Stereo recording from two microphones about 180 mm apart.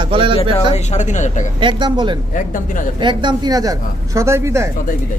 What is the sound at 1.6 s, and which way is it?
Speech, 25° right (ahead or behind).